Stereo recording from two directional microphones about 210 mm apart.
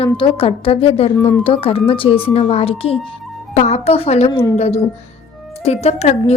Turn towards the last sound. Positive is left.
turn(degrees=30)  # may be behind; listen again after turning